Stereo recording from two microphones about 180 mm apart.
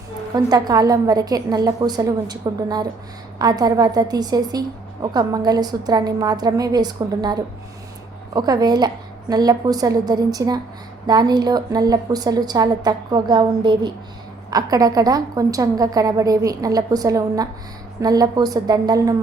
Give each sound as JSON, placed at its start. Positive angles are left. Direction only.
{"t": 0.3, "sound": "a woman's voice", "side_deg": -20}